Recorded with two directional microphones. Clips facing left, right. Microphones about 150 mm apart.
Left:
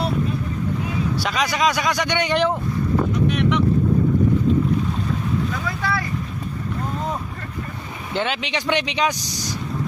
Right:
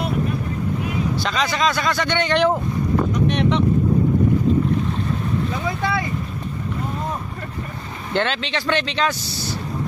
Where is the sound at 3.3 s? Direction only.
30° right (ahead or behind).